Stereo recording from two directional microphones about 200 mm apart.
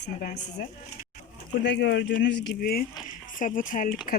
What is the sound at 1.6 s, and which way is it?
Speech, 60° left (ahead or behind).